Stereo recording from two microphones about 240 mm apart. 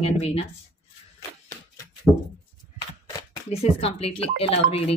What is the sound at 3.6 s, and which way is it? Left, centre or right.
Speech, left.